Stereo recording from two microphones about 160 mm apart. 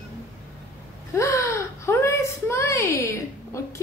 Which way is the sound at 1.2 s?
20° left (ahead or behind).